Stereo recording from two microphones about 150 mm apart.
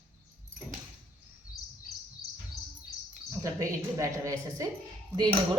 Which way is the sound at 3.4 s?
20° right (ahead or behind).